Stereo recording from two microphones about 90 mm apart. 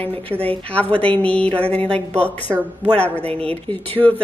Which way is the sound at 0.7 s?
15° left (ahead or behind).